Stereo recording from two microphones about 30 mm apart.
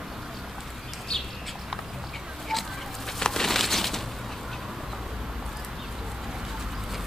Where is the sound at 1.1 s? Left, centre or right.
Centre.